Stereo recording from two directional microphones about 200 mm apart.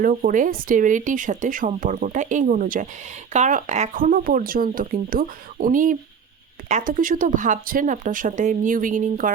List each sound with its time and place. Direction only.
0.0 s speech: 45° right (ahead or behind)